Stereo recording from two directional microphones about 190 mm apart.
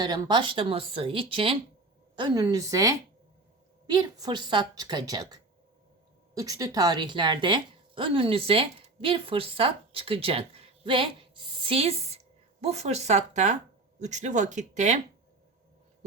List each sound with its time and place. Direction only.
0.0 s a woman's voice: 20° right (ahead or behind); by 14.9 s 40° right (ahead or behind)